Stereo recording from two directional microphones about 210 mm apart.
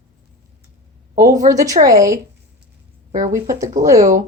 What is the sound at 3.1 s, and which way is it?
Speech, 35° right (ahead or behind).